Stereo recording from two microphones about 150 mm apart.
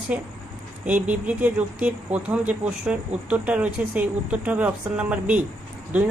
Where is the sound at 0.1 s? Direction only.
10° right (ahead or behind).